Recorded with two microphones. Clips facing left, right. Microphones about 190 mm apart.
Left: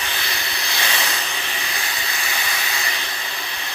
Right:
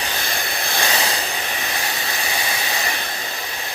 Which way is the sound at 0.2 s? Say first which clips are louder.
Right 3 dB; 50° right (ahead or behind).